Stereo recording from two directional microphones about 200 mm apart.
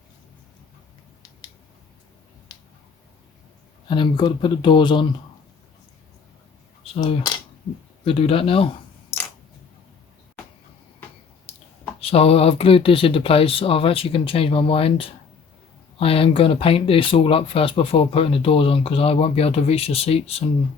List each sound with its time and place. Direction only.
3.8 s speech: 25° left (ahead or behind)
6.8 s speech: 30° left (ahead or behind)
11.5 s a sound: 30° left (ahead or behind)
11.9 s speech: 30° left (ahead or behind)